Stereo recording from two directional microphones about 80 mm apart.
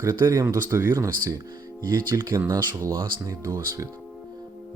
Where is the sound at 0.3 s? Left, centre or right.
Right.